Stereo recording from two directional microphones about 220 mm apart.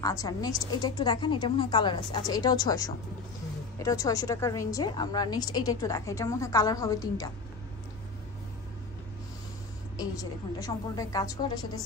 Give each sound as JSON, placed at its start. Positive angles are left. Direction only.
{"t": 0.0, "sound": "a woman's voice", "side_deg": 15}
{"t": 9.9, "sound": "a woman's voice", "side_deg": 15}